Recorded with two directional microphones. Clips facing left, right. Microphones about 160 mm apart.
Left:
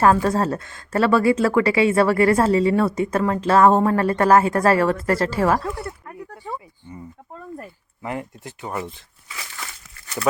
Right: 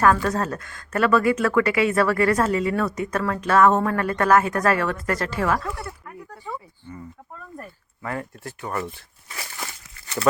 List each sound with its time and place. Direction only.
0.0 s speech: 30° left (ahead or behind)
6.8 s speech: 20° left (ahead or behind)
8.0 s speech: 20° left (ahead or behind)